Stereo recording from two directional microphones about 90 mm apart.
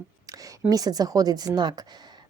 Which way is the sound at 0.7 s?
45° right (ahead or behind).